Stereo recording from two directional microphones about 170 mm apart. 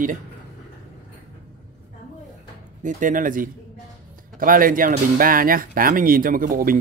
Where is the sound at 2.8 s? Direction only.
50° right (ahead or behind).